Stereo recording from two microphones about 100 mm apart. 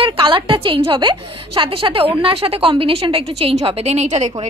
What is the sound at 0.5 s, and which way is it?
A woman's voice, 60° right (ahead or behind).